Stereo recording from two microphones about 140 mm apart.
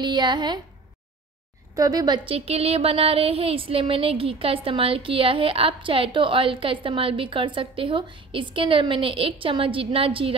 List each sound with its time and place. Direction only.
0.0 s speech: 30° right (ahead or behind)
1.8 s speech: 25° right (ahead or behind)